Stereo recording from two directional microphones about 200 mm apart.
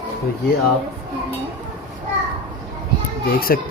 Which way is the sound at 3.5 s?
50° left (ahead or behind).